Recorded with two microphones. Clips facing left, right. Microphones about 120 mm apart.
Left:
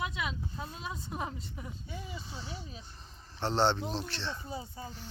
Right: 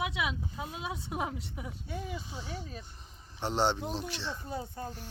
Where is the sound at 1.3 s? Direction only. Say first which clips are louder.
Right 3 dB; 70° right (ahead or behind).